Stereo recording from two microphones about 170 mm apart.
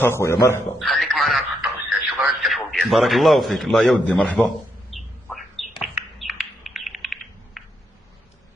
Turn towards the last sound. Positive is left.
turn(degrees=0)  # may be behind; listen again after turning